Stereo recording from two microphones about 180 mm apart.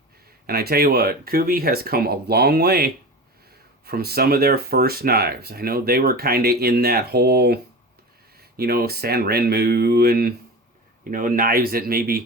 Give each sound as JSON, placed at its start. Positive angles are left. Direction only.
{"t": 0.4, "sound": "speech", "side_deg": -60}
{"t": 11.1, "sound": "speech", "side_deg": -50}